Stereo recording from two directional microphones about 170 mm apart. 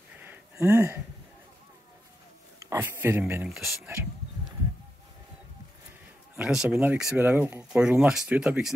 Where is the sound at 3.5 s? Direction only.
Centre (ahead or behind).